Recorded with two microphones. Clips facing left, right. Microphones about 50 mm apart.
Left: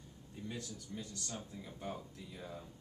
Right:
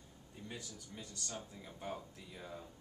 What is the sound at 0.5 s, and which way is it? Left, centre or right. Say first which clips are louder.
Speech: left 4 dB; centre.